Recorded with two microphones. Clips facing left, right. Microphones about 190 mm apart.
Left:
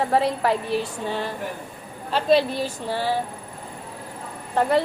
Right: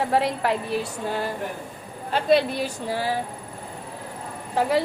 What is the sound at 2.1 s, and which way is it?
Speech, 55° right (ahead or behind).